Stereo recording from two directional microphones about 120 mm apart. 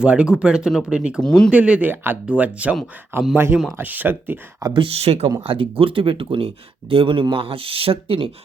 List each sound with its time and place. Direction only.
0.0 s speech: 10° right (ahead or behind)
1.2 s speech: 5° left (ahead or behind)
1.5 s speech: 10° right (ahead or behind)
4.6 s speech: 45° right (ahead or behind)